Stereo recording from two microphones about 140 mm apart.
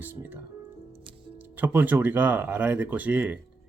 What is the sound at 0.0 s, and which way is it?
Music, 15° right (ahead or behind).